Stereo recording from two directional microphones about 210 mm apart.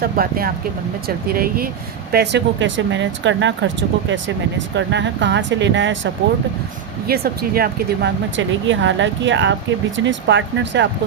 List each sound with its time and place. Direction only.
0.0 s speech: 45° right (ahead or behind); by 6.1 s 60° right (ahead or behind)
7.1 s speech: 45° right (ahead or behind)
8.4 s speech: 65° right (ahead or behind)